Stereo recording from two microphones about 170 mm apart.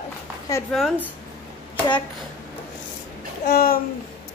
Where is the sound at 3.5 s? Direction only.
65° left (ahead or behind).